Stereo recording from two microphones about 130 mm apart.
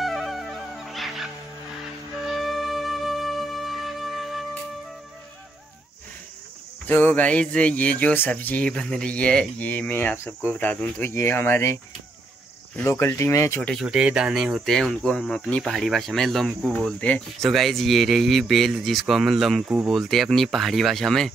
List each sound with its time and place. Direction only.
0.0 s music: centre (ahead or behind)
2.2 s wind instrument: centre (ahead or behind)
6.9 s speech: 15° left (ahead or behind)
13.6 s speech: 5° left (ahead or behind)
13.8 s speech: 5° right (ahead or behind)